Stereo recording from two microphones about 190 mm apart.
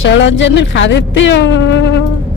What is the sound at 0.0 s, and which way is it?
A woman's voice, 70° left (ahead or behind).